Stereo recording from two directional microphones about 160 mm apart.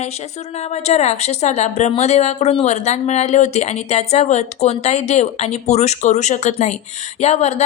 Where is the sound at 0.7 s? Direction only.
45° left (ahead or behind).